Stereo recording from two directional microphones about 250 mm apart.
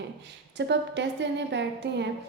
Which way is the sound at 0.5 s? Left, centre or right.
Right.